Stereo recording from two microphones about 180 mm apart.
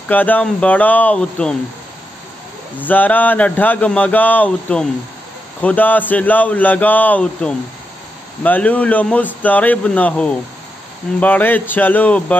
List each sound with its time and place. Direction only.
0.1 s speech: 10° left (ahead or behind)
2.8 s speech: 10° left (ahead or behind)